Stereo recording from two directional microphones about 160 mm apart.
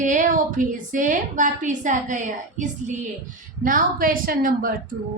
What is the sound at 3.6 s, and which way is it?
A woman's voice, 60° right (ahead or behind).